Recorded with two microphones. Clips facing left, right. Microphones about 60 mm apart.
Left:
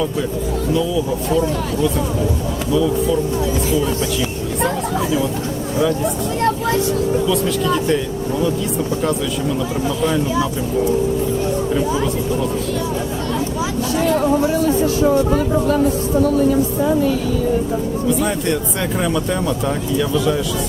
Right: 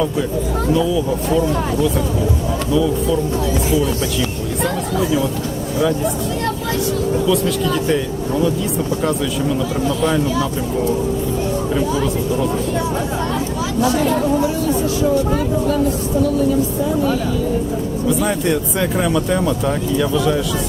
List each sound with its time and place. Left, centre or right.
2.7 s speech: centre
7.3 s speech: centre
14.4 s speech: left
18.2 s speech: centre